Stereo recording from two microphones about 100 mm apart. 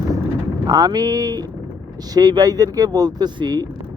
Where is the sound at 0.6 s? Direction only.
40° right (ahead or behind).